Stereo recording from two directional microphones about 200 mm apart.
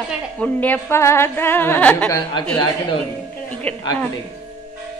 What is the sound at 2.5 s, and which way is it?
Speech, 20° left (ahead or behind).